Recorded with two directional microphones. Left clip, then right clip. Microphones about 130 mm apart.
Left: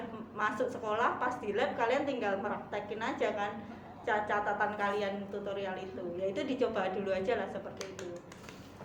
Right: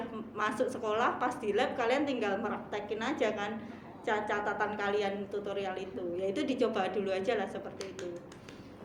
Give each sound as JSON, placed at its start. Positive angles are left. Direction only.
{"t": 0.3, "sound": "a woman's voice", "side_deg": -25}